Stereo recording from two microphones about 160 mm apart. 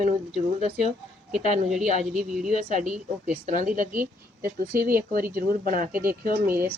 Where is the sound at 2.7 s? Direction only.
50° right (ahead or behind).